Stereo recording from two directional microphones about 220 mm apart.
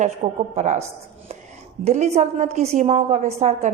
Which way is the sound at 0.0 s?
30° right (ahead or behind).